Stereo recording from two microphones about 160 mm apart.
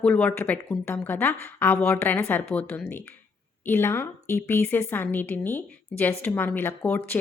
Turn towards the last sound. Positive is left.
turn(degrees=10)  # may be behind; listen again after turning